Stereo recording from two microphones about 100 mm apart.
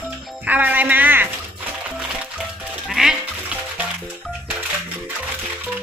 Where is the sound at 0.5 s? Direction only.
20° right (ahead or behind).